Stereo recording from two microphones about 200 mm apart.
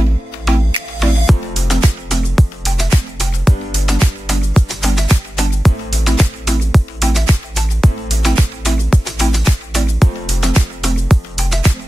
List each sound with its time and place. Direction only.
0.5 s music: centre (ahead or behind)